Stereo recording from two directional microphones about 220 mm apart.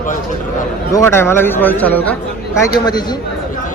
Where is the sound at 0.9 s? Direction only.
10° left (ahead or behind).